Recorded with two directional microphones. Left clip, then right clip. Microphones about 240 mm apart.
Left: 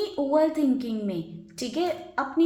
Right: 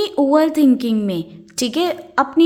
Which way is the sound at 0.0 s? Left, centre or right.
Right.